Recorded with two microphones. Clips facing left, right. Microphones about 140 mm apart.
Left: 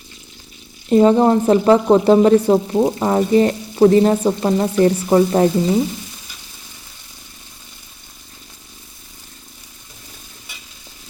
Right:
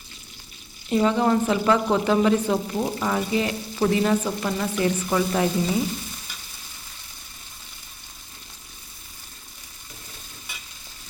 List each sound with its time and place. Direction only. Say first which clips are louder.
0.9 s a woman's voice: left 8 dB; 35° left (ahead or behind)